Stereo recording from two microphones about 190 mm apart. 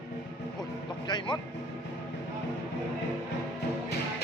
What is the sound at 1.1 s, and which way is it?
Speech, 25° left (ahead or behind).